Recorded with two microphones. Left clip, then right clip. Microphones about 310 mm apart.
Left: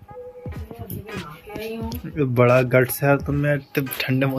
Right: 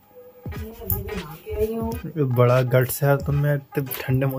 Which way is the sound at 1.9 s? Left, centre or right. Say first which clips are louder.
Left 1 dB; centre.